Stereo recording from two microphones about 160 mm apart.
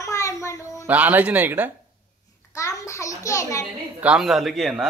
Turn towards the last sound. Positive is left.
turn(degrees=0)  # may be behind; listen again after turning